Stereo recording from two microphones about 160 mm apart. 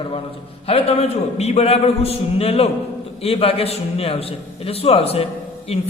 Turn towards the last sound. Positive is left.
turn(degrees=40)  # may be behind; listen again after turning